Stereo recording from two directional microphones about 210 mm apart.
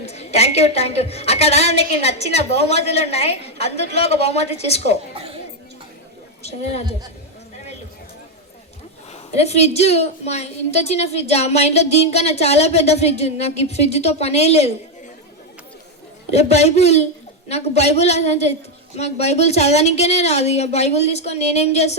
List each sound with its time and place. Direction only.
0.0 s a woman's voice: 30° left (ahead or behind)
9.4 s a woman's voice: 30° left (ahead or behind)
16.3 s a woman's voice: 30° left (ahead or behind)